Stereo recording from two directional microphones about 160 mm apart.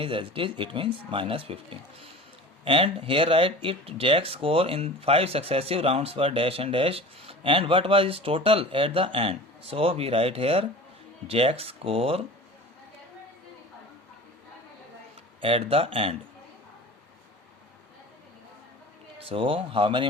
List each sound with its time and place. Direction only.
0.0 s speech: 35° right (ahead or behind)
15.4 s speech: 35° right (ahead or behind)
19.3 s speech: 35° right (ahead or behind)